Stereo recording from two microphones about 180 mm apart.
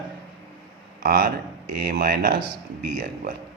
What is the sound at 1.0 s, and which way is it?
A man's voice, 55° right (ahead or behind).